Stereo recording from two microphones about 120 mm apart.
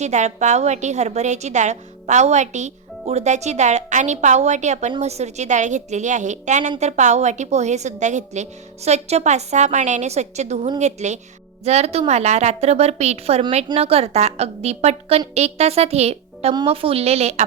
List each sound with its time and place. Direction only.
0.0 s a woman's voice: 75° right (ahead or behind)